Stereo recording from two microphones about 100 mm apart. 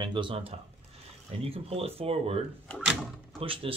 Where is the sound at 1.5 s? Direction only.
80° right.